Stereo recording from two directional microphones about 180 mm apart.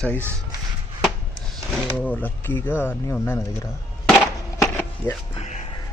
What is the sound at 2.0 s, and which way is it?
Speech, 10° left (ahead or behind).